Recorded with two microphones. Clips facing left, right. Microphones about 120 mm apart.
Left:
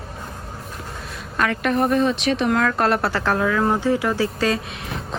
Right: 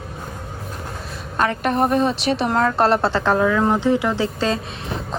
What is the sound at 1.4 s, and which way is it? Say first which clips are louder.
A woman's voice: right 1 dB; 35° right (ahead or behind).